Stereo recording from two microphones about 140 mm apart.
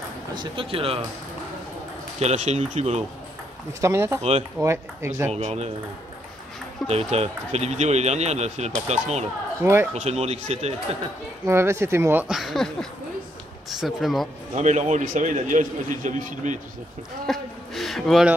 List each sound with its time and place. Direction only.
0.3 s speech: 35° right (ahead or behind)
2.1 s speech: 55° right (ahead or behind)
3.8 s speech: 20° right (ahead or behind)
4.2 s speech: 50° right (ahead or behind)
4.6 s speech: 20° right (ahead or behind)
5.3 s speech: 50° right (ahead or behind)
6.9 s speech: 45° right (ahead or behind)
9.6 s speech: 15° right (ahead or behind)
9.9 s speech: 50° right (ahead or behind)
11.4 s speech: 20° right (ahead or behind)
12.3 s speech: centre (ahead or behind)
13.7 s speech: centre (ahead or behind)
14.5 s a man's voice: 55° right (ahead or behind)
17.3 s a sound: centre (ahead or behind)